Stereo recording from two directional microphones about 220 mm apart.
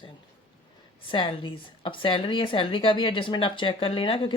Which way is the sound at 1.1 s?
20° left (ahead or behind).